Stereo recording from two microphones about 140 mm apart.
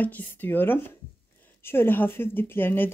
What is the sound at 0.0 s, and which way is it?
Speech, 10° left (ahead or behind).